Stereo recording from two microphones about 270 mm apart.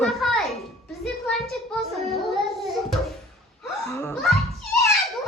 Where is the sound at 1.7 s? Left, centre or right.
Centre.